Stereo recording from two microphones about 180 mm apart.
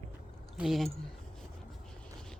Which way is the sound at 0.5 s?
Centre (ahead or behind).